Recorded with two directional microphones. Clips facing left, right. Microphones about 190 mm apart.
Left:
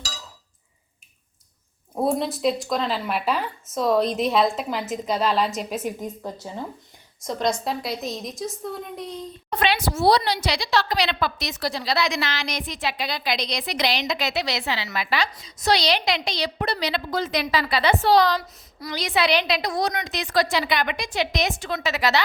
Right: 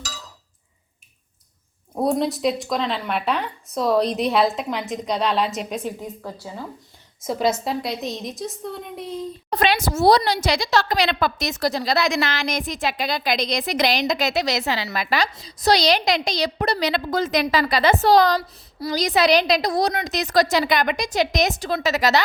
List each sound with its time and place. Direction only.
2.0 s a woman's voice: centre (ahead or behind)
6.0 s a woman's voice: 20° left (ahead or behind)
7.2 s a woman's voice: 5° right (ahead or behind)
9.5 s a woman's voice: 40° right (ahead or behind)